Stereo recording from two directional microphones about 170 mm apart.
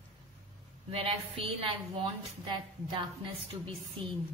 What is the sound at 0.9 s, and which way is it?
A woman's voice, 35° right (ahead or behind).